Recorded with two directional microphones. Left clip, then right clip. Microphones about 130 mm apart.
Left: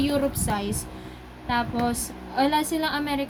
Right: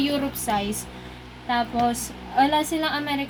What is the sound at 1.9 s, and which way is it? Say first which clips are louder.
A woman's voice: right 4 dB; 40° right (ahead or behind).